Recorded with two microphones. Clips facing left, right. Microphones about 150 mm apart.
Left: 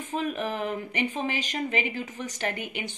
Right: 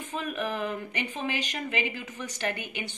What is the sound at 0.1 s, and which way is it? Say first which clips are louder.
Speech: left 3 dB; 35° left (ahead or behind).